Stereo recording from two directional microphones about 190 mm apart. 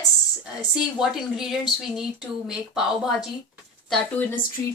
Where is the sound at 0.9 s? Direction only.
Centre (ahead or behind).